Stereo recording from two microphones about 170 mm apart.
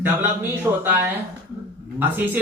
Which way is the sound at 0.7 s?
20° right (ahead or behind).